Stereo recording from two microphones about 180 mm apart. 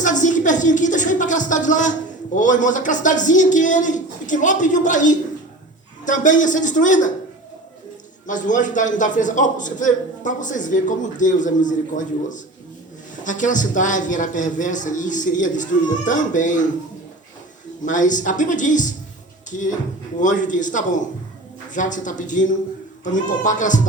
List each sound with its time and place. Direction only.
0.0 s a woman's voice: 45° left (ahead or behind)
8.3 s a woman's voice: 45° left (ahead or behind)
17.8 s a woman's voice: 45° left (ahead or behind)